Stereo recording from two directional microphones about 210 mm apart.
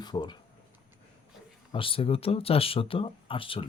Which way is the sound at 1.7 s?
25° left (ahead or behind).